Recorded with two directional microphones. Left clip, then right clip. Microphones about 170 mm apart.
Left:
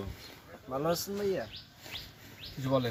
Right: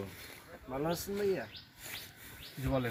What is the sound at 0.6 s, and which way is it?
Speech, 5° left (ahead or behind).